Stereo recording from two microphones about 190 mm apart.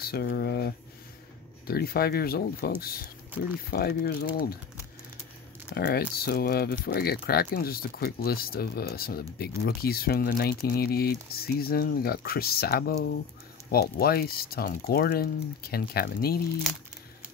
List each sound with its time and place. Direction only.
0.0 s speech: 55° left (ahead or behind)
5.8 s speech: 55° left (ahead or behind)